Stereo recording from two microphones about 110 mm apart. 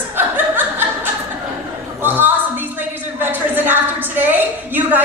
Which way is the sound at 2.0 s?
20° right (ahead or behind).